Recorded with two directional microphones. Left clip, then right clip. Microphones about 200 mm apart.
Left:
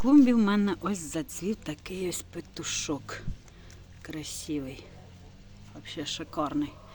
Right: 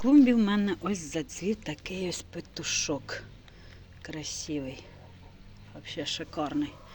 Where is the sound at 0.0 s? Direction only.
15° left (ahead or behind).